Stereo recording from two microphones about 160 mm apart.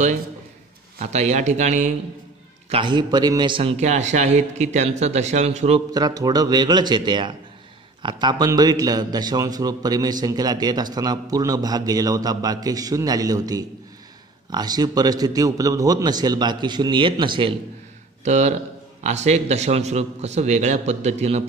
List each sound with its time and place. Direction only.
0.9 s a man's voice: 45° right (ahead or behind)
2.7 s a man's voice: 30° right (ahead or behind)
5.9 s a man's voice: 25° right (ahead or behind)
18.2 s a man's voice: 45° right (ahead or behind)